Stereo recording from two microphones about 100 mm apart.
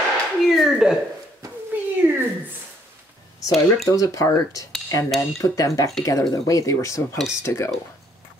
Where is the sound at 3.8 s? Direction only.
35° left (ahead or behind).